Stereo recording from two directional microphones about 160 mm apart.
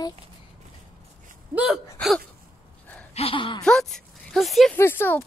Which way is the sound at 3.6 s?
5° left (ahead or behind).